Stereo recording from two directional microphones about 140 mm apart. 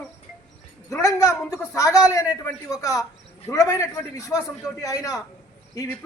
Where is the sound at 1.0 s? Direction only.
25° left (ahead or behind).